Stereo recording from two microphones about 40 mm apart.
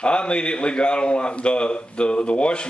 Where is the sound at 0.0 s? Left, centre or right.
Left.